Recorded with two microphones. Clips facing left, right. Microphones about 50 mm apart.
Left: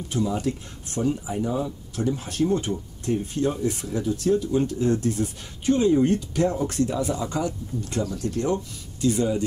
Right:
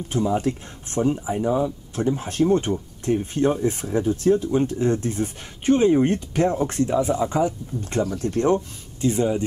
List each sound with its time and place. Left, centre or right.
0.1 s speech: right
8.5 s speech: right